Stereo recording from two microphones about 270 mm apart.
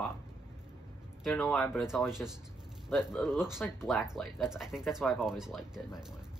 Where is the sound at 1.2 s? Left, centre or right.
Centre.